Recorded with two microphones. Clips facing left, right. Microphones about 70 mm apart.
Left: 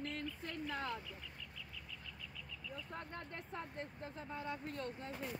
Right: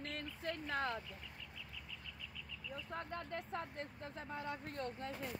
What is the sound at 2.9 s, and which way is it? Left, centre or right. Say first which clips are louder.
Speech: right 6 dB; right.